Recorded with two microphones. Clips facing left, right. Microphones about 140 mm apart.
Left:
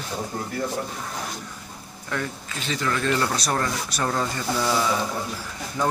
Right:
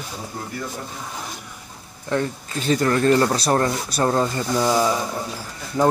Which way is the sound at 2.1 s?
30° right (ahead or behind).